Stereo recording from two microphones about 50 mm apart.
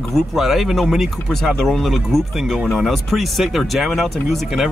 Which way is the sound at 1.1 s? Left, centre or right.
Centre.